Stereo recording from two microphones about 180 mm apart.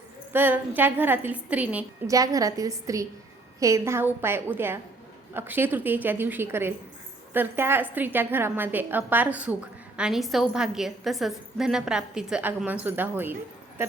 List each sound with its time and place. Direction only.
0.3 s a woman's voice: 10° right (ahead or behind)
2.1 s a woman's voice: 20° right (ahead or behind)